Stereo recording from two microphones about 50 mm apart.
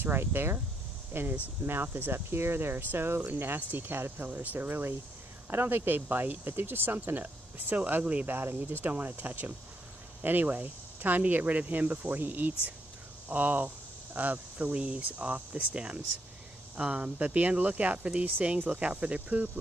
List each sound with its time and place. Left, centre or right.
0.0 s speech: right
4.3 s speech: right
4.6 s speech: right
8.3 s speech: right
8.8 s speech: right